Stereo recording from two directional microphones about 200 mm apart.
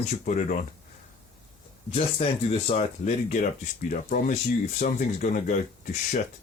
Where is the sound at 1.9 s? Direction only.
30° left (ahead or behind).